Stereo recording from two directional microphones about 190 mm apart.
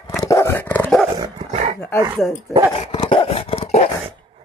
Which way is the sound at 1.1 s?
20° right (ahead or behind).